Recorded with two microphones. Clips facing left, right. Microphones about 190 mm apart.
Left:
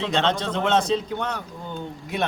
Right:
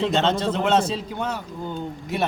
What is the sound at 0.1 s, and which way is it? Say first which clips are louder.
A man's voice: right 2 dB; 5° right (ahead or behind).